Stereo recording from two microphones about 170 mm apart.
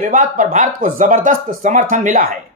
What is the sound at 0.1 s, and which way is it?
Speech, 50° right (ahead or behind).